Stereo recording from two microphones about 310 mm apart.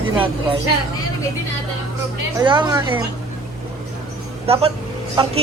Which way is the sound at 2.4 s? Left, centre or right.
Centre.